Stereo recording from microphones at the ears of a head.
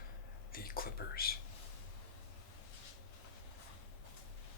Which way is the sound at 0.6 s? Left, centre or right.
Left.